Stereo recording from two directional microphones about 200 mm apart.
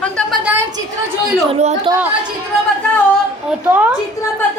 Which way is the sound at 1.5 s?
30° right (ahead or behind).